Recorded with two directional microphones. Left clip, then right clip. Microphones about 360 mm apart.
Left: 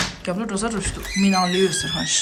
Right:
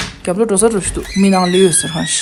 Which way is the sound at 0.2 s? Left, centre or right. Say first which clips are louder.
Right 12 dB; centre.